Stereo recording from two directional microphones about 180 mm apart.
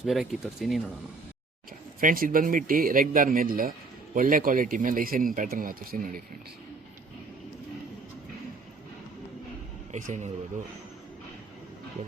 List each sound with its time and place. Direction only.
0.0 s speech: centre (ahead or behind)
2.0 s speech: 50° right (ahead or behind)
9.9 s speech: 40° right (ahead or behind)